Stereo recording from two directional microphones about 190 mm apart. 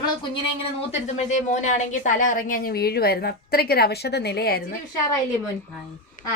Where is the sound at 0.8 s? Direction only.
35° left (ahead or behind); by 4.6 s 55° left (ahead or behind).